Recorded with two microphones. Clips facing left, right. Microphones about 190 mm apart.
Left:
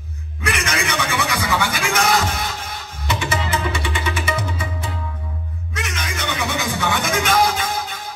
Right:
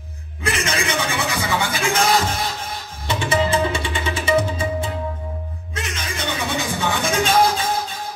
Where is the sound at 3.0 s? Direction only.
30° right (ahead or behind).